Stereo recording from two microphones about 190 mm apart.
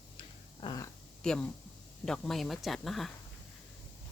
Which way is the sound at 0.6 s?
20° left (ahead or behind).